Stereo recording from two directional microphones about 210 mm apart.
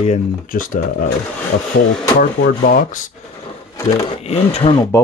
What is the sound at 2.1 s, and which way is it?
Speech, 40° left (ahead or behind).